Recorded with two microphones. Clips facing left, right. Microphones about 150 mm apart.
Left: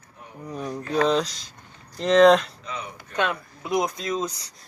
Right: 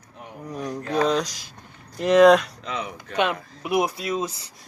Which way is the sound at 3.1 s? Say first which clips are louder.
Right 2 dB; 15° right (ahead or behind).